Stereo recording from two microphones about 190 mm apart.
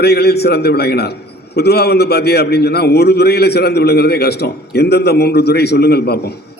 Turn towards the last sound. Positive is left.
turn(degrees=60)  # may be behind; listen again after turning